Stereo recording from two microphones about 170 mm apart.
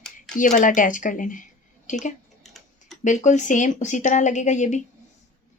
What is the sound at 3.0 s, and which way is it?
Speech, 45° left (ahead or behind).